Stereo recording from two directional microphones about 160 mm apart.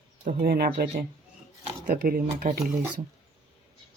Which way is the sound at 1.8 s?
65° right (ahead or behind).